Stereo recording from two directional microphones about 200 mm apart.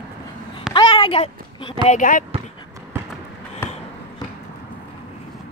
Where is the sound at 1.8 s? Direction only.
40° left (ahead or behind).